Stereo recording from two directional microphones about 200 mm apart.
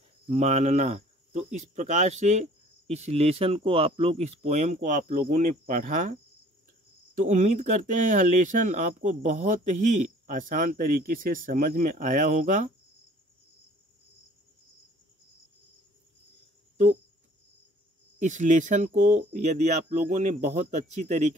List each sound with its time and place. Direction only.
0.3 s speech: 35° right (ahead or behind)
7.2 s speech: 40° right (ahead or behind)
16.7 s cricket: 35° right (ahead or behind)
18.2 s speech: 40° right (ahead or behind)